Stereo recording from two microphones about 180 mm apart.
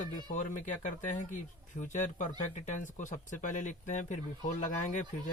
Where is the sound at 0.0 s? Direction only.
45° left (ahead or behind).